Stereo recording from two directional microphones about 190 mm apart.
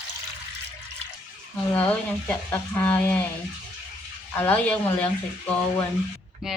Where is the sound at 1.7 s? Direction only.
5° left (ahead or behind).